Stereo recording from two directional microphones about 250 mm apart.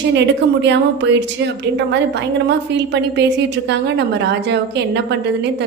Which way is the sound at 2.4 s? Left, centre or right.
Right.